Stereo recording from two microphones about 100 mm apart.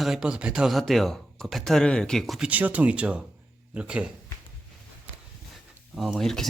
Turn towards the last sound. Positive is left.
turn(degrees=5)  # may be behind; listen again after turning